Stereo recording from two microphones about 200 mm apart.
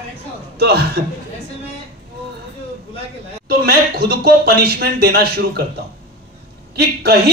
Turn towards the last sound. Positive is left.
turn(degrees=-55)  # may be behind; listen again after turning